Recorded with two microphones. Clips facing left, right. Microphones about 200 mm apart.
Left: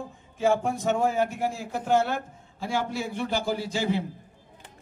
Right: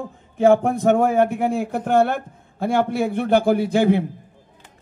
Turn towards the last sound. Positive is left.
turn(degrees=-55)  # may be behind; listen again after turning